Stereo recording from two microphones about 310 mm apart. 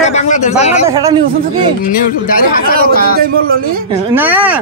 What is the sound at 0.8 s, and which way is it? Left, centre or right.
Speech, centre.